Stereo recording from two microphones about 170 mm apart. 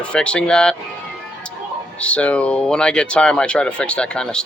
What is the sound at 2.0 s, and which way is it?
Speech, 5° left (ahead or behind).